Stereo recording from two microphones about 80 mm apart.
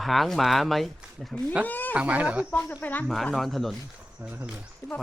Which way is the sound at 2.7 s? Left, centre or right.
Left.